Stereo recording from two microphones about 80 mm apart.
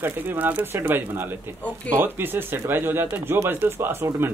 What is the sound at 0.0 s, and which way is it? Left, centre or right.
Speech, right.